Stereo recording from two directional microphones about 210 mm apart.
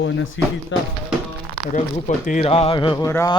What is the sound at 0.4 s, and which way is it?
Speech, 60° left (ahead or behind).